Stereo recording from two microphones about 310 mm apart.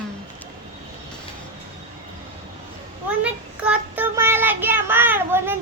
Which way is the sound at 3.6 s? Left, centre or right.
Centre.